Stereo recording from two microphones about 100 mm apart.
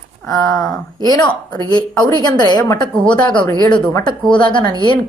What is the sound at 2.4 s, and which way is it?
Speech, 45° left (ahead or behind).